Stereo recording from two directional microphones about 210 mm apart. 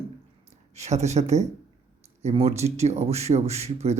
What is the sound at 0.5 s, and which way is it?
Speech, 30° right (ahead or behind).